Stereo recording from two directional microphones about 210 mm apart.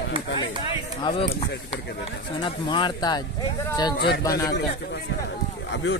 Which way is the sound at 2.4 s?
20° left (ahead or behind).